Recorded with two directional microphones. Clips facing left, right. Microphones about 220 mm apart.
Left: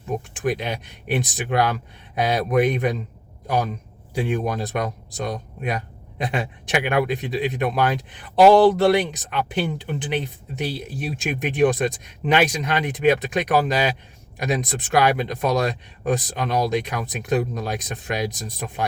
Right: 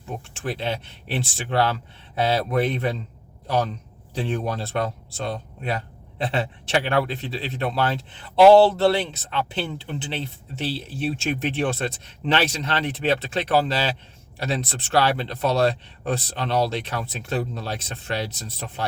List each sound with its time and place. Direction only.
0.3 s speech: 15° left (ahead or behind)
4.1 s speech: 15° left (ahead or behind)